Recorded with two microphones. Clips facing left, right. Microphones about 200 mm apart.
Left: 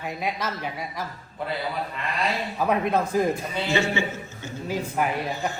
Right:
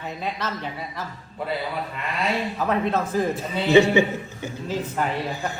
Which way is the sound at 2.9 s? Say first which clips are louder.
Left 1 dB; 15° left (ahead or behind).